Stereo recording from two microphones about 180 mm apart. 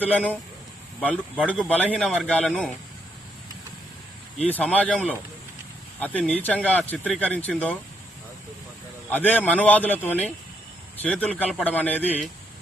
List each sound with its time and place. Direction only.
0.0 s a man's voice: 10° left (ahead or behind)
4.4 s a man's voice: 10° left (ahead or behind)
9.0 s a man's voice: 10° left (ahead or behind)